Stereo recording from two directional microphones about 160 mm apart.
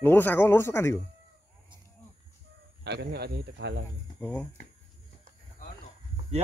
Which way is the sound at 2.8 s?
90° right.